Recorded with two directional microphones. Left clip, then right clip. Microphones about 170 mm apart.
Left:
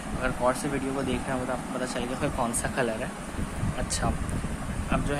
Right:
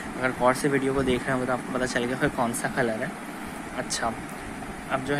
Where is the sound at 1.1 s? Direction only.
25° right (ahead or behind).